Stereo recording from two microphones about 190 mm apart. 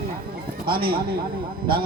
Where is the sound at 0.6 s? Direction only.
50° right (ahead or behind).